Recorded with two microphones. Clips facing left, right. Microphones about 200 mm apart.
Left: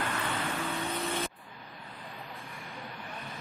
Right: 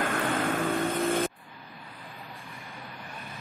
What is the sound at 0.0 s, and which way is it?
Vehicle, 50° right (ahead or behind).